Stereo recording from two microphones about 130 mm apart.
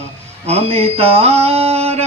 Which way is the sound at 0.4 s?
55° right (ahead or behind).